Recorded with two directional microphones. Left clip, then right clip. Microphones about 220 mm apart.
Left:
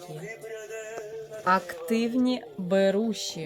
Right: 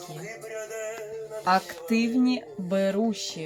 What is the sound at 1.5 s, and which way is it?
A woman's voice, 30° left (ahead or behind).